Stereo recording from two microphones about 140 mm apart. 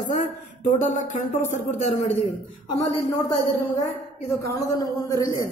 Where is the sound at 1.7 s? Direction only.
50° left (ahead or behind).